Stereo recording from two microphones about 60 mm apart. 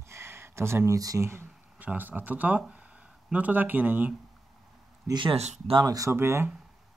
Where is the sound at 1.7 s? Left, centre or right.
Right.